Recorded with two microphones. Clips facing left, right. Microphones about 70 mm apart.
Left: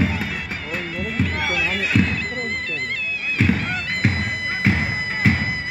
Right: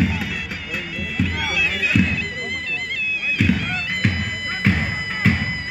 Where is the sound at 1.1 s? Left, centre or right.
Left.